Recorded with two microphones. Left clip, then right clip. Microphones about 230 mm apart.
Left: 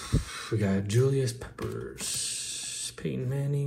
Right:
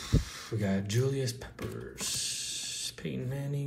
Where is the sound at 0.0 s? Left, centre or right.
Centre.